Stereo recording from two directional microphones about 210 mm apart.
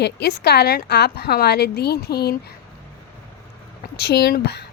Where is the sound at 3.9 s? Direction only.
50° left (ahead or behind).